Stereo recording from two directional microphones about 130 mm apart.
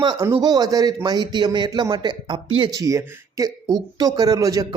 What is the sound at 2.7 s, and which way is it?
Speech, 25° right (ahead or behind).